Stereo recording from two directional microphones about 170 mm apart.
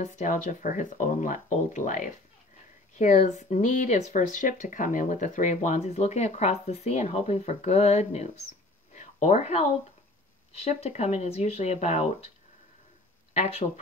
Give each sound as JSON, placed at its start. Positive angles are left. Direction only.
{"t": 0.0, "sound": "speech", "side_deg": 45}
{"t": 8.9, "sound": "a sound", "side_deg": 45}
{"t": 10.5, "sound": "speech", "side_deg": 35}